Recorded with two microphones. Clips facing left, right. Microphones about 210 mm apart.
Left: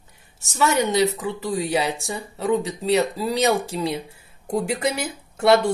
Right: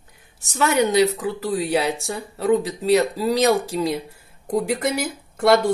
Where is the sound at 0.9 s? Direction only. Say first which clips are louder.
Right 3 dB; centre (ahead or behind).